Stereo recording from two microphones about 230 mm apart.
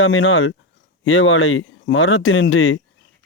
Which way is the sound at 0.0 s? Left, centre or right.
Left.